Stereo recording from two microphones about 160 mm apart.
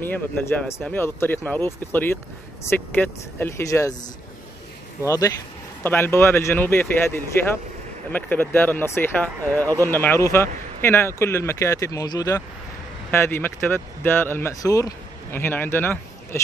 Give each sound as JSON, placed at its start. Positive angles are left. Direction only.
{"t": 0.0, "sound": "speech", "side_deg": 15}
{"t": 5.0, "sound": "speech", "side_deg": 20}